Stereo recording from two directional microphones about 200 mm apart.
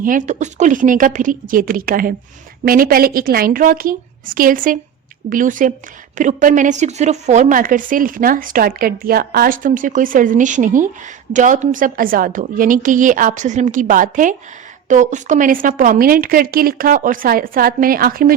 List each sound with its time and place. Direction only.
0.0 s a woman's voice: 40° right (ahead or behind)